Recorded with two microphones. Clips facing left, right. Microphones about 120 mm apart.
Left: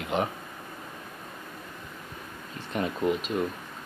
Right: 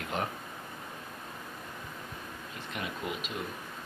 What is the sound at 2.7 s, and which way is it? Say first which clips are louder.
Speech: left 10 dB; 35° left (ahead or behind).